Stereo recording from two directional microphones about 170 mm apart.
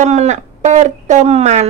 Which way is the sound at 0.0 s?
45° right (ahead or behind).